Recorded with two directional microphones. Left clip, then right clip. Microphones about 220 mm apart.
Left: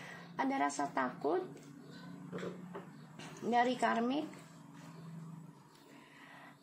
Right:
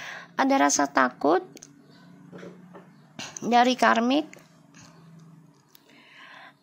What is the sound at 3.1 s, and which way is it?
Speech, 45° right (ahead or behind).